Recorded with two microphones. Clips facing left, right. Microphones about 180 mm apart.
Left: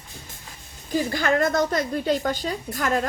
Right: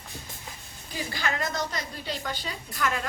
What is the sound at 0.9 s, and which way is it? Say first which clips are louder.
A woman's voice: left 10 dB; 50° left (ahead or behind).